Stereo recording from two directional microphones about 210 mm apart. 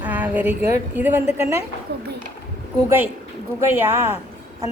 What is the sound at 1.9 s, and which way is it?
Speech, 55° right (ahead or behind).